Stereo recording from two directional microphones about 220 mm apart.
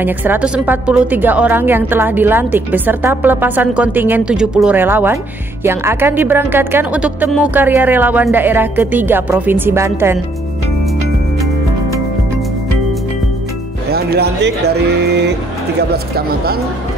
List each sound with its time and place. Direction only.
0.0 s a woman's voice: 10° right (ahead or behind)
13.9 s speech: 45° right (ahead or behind)